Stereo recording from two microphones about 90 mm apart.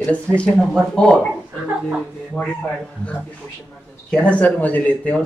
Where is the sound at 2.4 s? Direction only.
15° left (ahead or behind).